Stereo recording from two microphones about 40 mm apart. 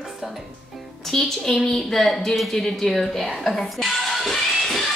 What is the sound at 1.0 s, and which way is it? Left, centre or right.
A woman's voice, centre.